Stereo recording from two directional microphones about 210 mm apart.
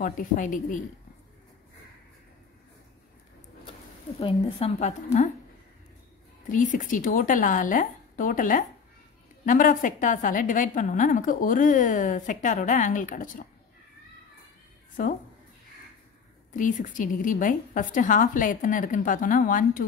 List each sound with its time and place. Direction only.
0.0 s a woman's voice: 40° left (ahead or behind)
4.2 s a woman's voice: 25° left (ahead or behind)
6.5 s a woman's voice: 40° left (ahead or behind)
16.5 s a woman's voice: 40° left (ahead or behind)